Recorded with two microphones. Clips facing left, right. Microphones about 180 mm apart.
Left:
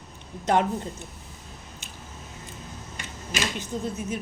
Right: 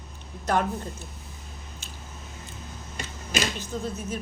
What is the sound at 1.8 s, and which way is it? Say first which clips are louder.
Squish: even; 15° left (ahead or behind).